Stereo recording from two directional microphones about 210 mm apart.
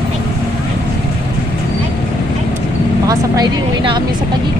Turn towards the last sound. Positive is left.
turn(degrees=-20)  # may be behind; listen again after turning